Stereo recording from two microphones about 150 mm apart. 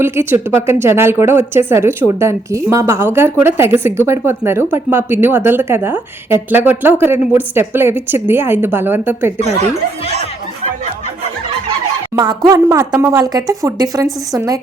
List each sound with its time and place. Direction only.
0.0 s a woman's voice: 15° right (ahead or behind)
12.1 s speech: 30° right (ahead or behind)